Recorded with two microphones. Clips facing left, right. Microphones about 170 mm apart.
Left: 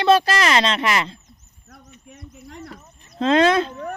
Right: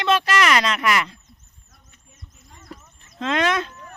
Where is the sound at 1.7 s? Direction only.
70° left (ahead or behind).